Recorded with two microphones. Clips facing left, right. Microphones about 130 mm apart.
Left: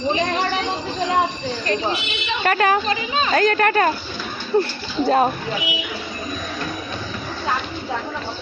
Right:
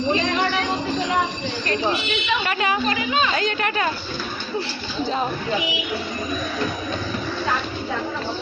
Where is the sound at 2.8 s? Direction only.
30° left (ahead or behind).